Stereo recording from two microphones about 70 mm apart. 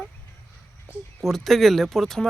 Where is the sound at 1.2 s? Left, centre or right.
Centre.